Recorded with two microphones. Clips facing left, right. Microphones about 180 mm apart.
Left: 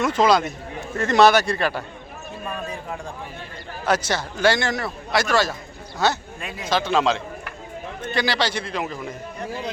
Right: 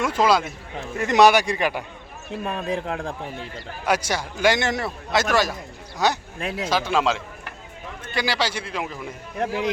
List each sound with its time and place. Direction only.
0.0 s a man's voice: 10° right (ahead or behind)
2.3 s speech: 90° right
3.8 s a man's voice: 10° right (ahead or behind)
9.4 s a man's voice: 90° right